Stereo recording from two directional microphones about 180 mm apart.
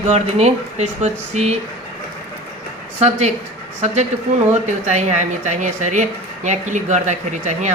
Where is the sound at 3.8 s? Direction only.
40° right (ahead or behind).